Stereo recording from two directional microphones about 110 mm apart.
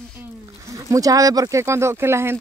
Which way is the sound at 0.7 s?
30° right (ahead or behind).